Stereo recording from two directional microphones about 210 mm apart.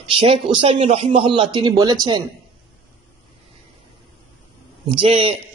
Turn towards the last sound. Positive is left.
turn(degrees=-25)  # may be behind; listen again after turning